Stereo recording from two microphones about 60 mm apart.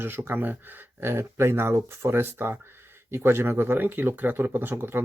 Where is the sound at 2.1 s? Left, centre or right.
Right.